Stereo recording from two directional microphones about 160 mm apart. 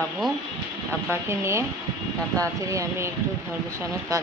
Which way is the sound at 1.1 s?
15° right (ahead or behind).